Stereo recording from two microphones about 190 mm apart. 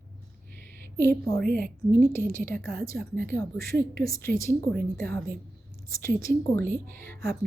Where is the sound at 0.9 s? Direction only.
10° left (ahead or behind).